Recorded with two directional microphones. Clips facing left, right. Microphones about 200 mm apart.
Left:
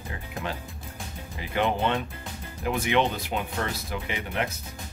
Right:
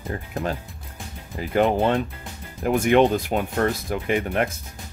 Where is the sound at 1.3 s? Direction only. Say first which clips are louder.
Right 6 dB; 45° right (ahead or behind).